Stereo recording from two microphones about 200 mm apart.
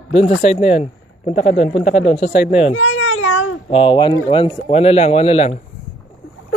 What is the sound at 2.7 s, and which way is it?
Babbling, 80° left.